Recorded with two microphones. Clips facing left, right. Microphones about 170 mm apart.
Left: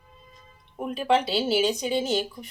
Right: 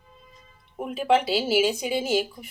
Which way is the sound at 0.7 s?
5° right (ahead or behind).